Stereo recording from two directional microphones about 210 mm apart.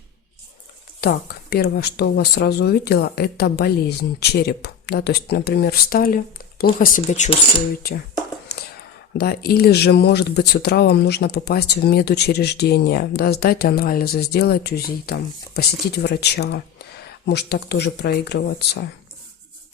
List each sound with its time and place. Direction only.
1.0 s speech: 50° left (ahead or behind)
8.5 s a sound: 50° left (ahead or behind)
9.1 s speech: 45° left (ahead or behind)